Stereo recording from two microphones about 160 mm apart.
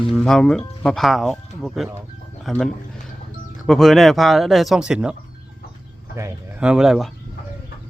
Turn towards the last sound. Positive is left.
turn(degrees=0)  # may be behind; listen again after turning